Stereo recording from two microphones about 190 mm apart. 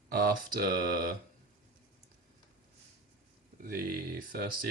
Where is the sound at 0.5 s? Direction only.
55° right (ahead or behind).